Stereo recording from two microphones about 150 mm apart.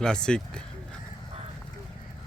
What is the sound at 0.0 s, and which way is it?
Speech, 5° left (ahead or behind).